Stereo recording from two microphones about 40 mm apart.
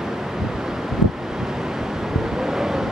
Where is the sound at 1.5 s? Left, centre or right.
Centre.